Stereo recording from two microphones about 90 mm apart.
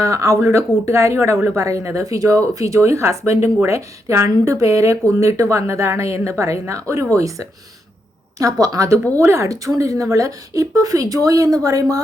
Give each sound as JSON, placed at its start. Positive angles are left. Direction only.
{"t": 0.0, "sound": "a woman's voice", "side_deg": -35}